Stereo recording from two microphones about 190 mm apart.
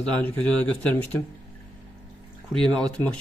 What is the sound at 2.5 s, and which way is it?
Speech, centre (ahead or behind).